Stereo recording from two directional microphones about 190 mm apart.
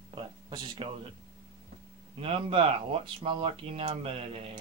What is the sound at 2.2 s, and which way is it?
Speech, 30° right (ahead or behind).